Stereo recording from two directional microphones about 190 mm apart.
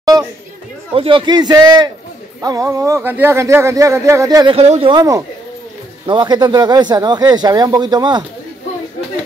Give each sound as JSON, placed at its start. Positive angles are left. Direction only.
{"t": 0.9, "sound": "speech", "side_deg": -25}
{"t": 4.6, "sound": "speech", "side_deg": -30}